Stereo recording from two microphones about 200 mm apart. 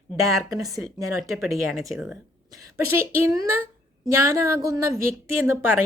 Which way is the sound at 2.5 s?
15° right (ahead or behind).